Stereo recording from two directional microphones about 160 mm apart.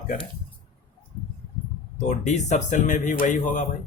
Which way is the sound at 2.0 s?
45° left (ahead or behind).